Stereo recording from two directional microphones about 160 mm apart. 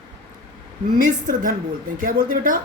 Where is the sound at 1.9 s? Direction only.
55° right (ahead or behind).